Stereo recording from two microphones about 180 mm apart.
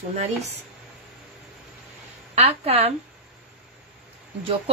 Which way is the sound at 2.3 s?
35° right (ahead or behind).